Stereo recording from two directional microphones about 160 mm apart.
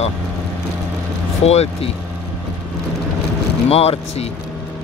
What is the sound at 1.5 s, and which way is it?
Speech, 40° left (ahead or behind).